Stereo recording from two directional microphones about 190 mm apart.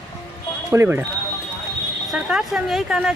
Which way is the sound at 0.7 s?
10° right (ahead or behind).